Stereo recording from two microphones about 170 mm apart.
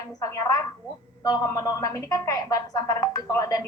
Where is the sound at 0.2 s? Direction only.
20° left (ahead or behind).